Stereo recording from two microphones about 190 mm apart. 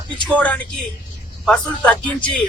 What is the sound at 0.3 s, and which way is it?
Speech, 10° left (ahead or behind).